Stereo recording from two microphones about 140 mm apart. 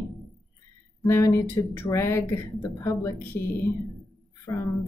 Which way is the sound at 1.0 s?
20° left (ahead or behind).